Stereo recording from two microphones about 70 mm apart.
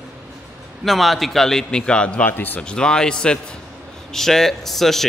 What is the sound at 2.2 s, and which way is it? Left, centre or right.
Speech, left.